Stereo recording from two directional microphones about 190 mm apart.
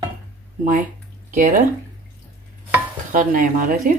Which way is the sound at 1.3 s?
40° right (ahead or behind).